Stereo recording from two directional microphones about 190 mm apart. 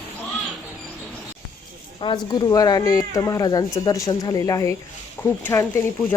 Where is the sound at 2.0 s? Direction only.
25° left (ahead or behind).